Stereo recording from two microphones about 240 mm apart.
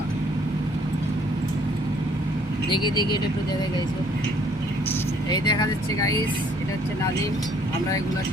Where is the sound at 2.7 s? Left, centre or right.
Centre.